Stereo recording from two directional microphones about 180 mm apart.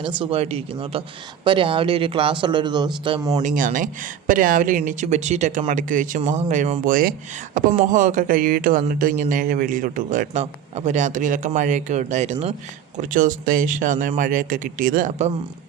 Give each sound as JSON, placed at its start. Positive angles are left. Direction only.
{"t": 0.0, "sound": "speech", "side_deg": -30}
{"t": 3.4, "sound": "speech", "side_deg": -45}